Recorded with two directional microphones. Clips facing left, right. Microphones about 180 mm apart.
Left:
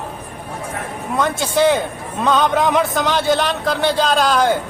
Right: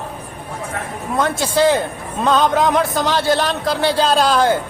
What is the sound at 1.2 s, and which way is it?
A man's voice, centre (ahead or behind).